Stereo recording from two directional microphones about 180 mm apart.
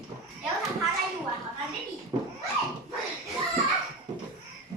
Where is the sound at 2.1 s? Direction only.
25° right (ahead or behind).